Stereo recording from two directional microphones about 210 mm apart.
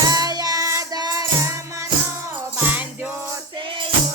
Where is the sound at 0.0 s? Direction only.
20° right (ahead or behind).